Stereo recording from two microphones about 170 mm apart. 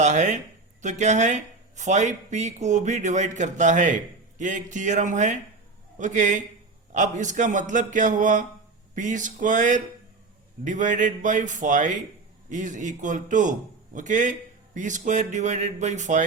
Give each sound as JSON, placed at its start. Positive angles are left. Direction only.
{"t": 0.0, "sound": "speech", "side_deg": -45}